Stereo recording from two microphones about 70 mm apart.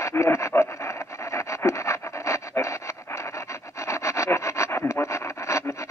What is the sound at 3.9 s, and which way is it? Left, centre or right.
Wood, left.